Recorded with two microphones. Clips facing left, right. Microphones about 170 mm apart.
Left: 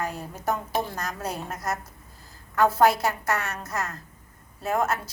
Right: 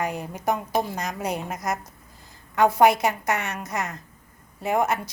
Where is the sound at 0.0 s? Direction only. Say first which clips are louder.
Right 3 dB; 15° right (ahead or behind).